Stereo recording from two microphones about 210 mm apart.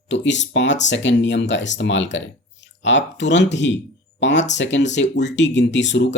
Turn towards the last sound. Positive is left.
turn(degrees=60)  # may be behind; listen again after turning